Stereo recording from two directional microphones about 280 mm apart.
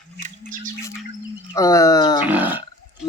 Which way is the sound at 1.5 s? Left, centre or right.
Centre.